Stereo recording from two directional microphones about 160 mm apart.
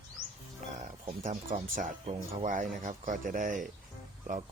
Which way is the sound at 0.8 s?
55° right (ahead or behind).